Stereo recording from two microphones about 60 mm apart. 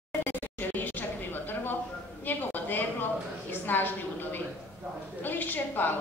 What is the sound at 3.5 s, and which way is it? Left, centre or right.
A woman's voice, left.